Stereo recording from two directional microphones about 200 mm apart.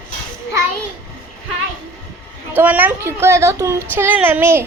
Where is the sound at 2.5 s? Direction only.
10° right (ahead or behind).